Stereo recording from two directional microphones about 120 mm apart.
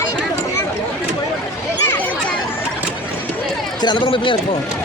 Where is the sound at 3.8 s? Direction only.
35° left (ahead or behind).